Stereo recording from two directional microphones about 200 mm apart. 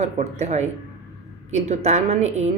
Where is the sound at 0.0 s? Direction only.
35° right (ahead or behind).